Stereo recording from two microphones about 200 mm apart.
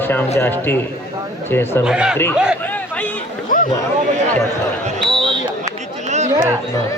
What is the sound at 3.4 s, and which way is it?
Chatter, 45° left (ahead or behind).